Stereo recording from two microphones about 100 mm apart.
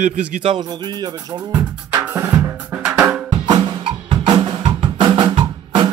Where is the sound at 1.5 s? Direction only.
15° right (ahead or behind).